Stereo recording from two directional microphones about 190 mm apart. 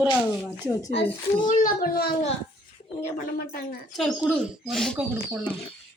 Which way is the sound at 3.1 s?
55° left (ahead or behind).